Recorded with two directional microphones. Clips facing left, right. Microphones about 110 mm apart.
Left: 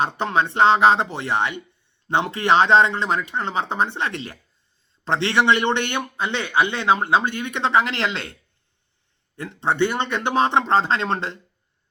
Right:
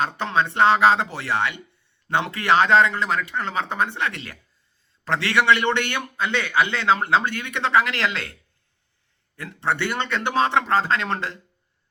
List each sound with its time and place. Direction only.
0.0 s a man's voice: 20° left (ahead or behind)